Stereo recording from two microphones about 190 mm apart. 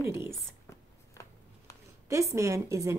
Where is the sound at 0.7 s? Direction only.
15° left (ahead or behind).